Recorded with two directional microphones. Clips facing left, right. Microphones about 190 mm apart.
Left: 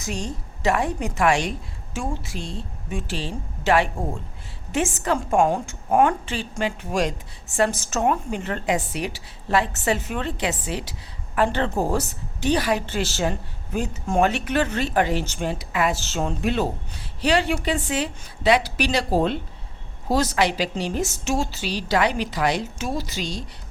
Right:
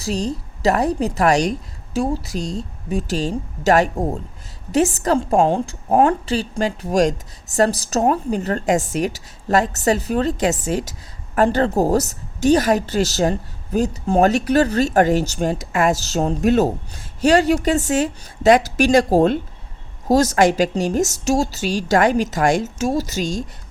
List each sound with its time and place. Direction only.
0.0 s a woman's voice: 35° right (ahead or behind)